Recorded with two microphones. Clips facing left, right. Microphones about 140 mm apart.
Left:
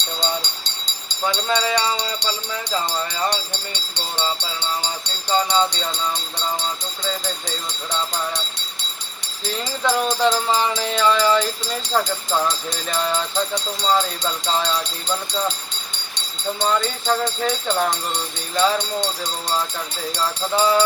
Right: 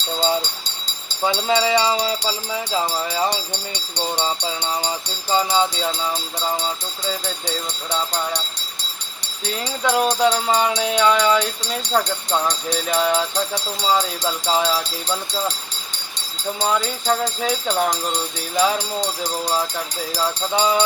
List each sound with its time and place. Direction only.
0.2 s a sound: 10° right (ahead or behind)
1.2 s jingle bell: 15° right (ahead or behind)
9.2 s music: centre (ahead or behind)
16.6 s music: centre (ahead or behind)